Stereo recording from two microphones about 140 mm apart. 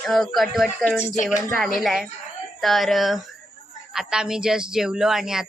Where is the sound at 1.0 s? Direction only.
60° left (ahead or behind).